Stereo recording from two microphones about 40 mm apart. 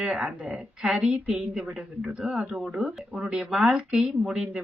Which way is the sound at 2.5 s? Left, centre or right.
Centre.